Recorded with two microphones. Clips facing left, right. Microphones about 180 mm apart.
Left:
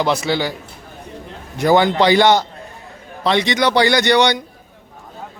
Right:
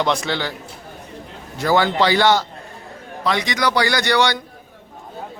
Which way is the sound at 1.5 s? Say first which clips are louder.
Left 4 dB; 20° left (ahead or behind).